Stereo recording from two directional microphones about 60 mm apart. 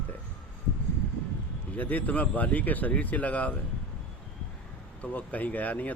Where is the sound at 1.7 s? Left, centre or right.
Left.